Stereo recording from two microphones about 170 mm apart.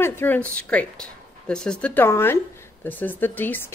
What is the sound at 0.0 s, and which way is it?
Speech, 10° left (ahead or behind).